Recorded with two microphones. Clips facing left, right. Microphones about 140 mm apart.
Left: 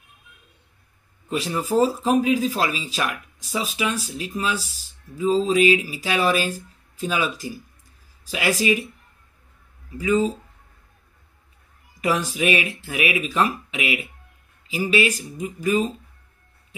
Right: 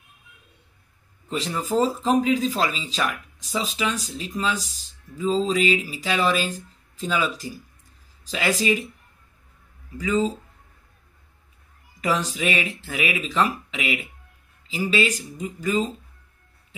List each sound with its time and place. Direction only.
1.3 s speech: 10° left (ahead or behind)
9.9 s speech: 15° left (ahead or behind)
12.0 s speech: 10° left (ahead or behind)